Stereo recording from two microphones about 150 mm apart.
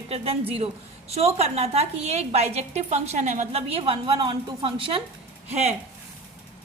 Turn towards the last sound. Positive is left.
turn(degrees=-45)  # may be behind; listen again after turning